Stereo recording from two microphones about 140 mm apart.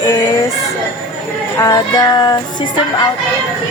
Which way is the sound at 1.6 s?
30° left (ahead or behind).